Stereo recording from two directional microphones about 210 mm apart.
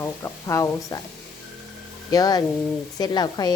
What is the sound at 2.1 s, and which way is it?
A woman's voice, 15° left (ahead or behind).